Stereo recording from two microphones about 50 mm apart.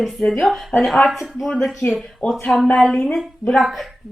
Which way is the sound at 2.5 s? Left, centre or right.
Centre.